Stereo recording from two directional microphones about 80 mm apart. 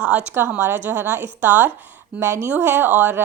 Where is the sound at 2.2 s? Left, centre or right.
Right.